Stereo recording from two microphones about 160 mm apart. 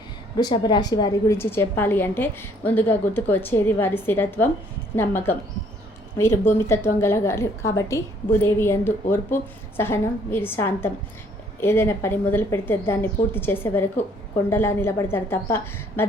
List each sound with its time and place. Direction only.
0.3 s a woman's voice: 25° left (ahead or behind)
1.4 s a woman's voice: 15° left (ahead or behind)